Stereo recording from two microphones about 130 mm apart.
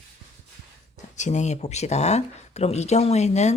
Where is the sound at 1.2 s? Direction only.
65° left (ahead or behind).